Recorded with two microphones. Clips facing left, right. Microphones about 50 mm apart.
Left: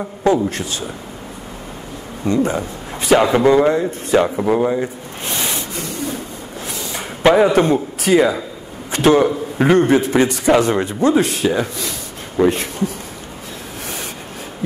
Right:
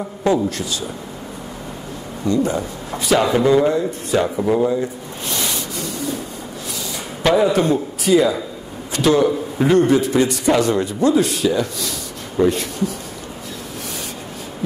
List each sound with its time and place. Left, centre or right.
0.2 s a man's voice: left
2.2 s a man's voice: left
5.3 s rub: left
7.2 s a man's voice: left